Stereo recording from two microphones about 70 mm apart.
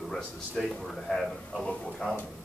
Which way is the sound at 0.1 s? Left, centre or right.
Centre.